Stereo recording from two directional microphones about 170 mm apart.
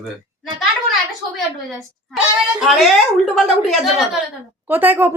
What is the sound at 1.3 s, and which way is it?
A woman's voice, centre (ahead or behind).